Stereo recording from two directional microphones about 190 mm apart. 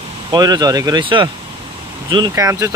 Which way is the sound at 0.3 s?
20° right (ahead or behind).